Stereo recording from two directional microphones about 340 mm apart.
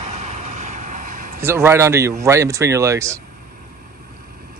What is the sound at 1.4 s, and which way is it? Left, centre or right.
Speech, centre.